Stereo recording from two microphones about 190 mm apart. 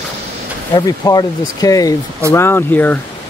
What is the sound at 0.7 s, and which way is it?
Speech, 20° left (ahead or behind).